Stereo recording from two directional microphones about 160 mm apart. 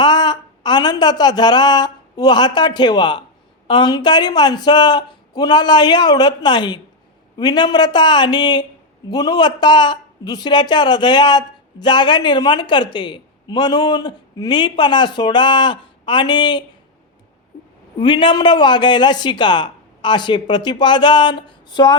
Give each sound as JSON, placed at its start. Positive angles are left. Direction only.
{"t": 0.0, "sound": "a woman's voice", "side_deg": 25}
{"t": 18.0, "sound": "speech", "side_deg": 30}